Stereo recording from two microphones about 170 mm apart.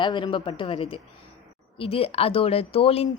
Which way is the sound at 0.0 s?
30° left (ahead or behind).